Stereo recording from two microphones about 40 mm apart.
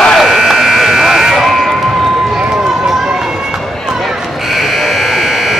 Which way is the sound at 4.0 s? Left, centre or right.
Centre.